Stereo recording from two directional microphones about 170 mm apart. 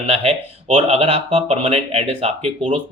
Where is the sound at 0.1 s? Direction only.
40° right (ahead or behind).